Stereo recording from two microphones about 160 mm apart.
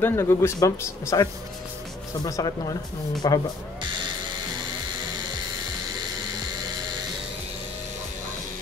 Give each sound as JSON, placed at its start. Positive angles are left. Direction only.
{"t": 0.0, "sound": "a man's voice", "side_deg": 15}